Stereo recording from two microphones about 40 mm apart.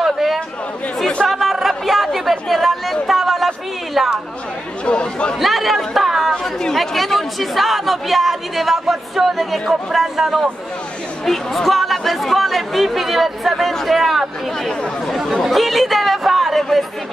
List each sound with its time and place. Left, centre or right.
0.0 s chatter: centre
1.2 s a sound: centre
4.8 s speech: left
5.4 s chatter: centre
6.3 s chatter: centre
6.7 s a man's voice: centre
11.2 s speech: centre
15.4 s speech: centre